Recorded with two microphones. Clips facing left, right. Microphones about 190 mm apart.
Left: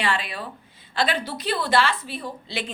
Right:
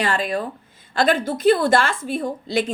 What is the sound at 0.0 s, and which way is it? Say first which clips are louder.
A woman's voice: right 5 dB; 45° right (ahead or behind).